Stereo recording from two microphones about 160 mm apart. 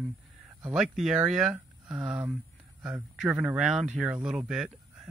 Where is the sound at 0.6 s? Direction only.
5° right (ahead or behind).